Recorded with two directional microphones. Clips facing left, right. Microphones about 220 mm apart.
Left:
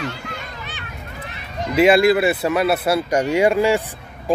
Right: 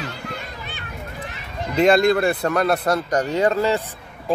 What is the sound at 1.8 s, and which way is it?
Speech, 5° left (ahead or behind).